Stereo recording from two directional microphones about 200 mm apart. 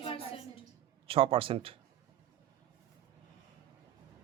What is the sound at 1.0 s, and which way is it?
Speech, 30° right (ahead or behind).